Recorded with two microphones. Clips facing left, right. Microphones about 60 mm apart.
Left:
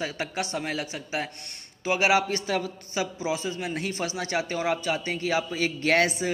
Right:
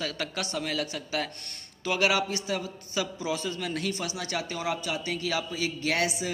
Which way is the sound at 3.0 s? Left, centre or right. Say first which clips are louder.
Left 2 dB; left.